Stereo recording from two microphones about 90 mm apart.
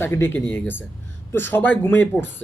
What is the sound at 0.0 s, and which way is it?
Speech, 25° left (ahead or behind).